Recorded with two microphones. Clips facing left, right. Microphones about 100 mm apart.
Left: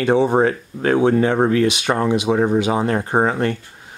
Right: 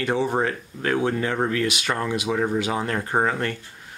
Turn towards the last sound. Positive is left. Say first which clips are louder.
# left 5 dB
turn(degrees=20)  # may be behind; listen again after turning